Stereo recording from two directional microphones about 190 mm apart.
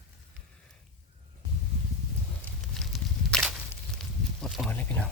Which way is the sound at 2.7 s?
Centre (ahead or behind).